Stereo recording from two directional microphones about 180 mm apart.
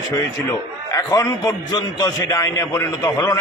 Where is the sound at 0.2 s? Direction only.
20° left (ahead or behind).